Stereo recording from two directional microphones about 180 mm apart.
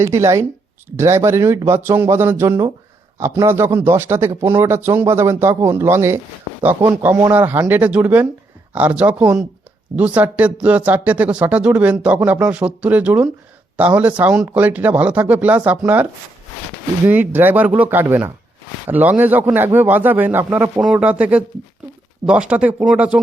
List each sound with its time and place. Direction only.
0.0 s speech: 15° right (ahead or behind)
2.5 s speech: 25° right (ahead or behind); by 16.0 s 10° right (ahead or behind)
17.1 s speech: 10° right (ahead or behind)